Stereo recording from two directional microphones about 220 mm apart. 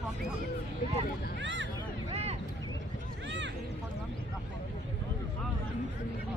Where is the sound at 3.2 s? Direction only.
55° right (ahead or behind).